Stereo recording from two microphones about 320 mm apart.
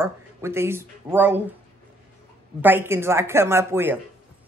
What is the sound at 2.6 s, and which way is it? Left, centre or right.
Speech, centre.